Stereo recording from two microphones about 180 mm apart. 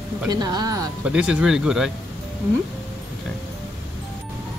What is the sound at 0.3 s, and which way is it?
Speech, 20° right (ahead or behind).